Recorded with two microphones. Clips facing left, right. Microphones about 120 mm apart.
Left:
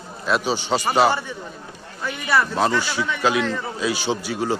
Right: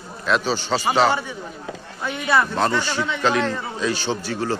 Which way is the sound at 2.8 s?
10° left (ahead or behind).